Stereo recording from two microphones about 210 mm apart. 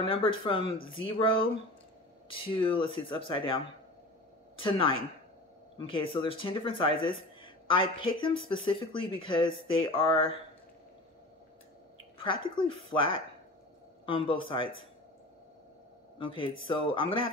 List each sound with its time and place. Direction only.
0.0 s speech: 25° left (ahead or behind)
7.4 s a sound: 20° left (ahead or behind)
8.2 s speech: 25° left (ahead or behind)
12.2 s speech: 25° left (ahead or behind)
16.2 s speech: 25° left (ahead or behind)